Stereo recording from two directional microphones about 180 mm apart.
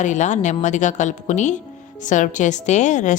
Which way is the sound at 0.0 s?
40° left (ahead or behind).